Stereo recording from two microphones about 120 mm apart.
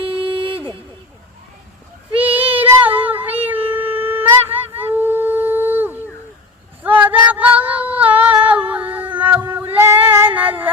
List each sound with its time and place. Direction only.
0.0 s vehicle: 50° right (ahead or behind)
2.2 s child singing: 15° right (ahead or behind)
3.7 s shofar: 15° right (ahead or behind)
6.8 s female singing: 15° right (ahead or behind)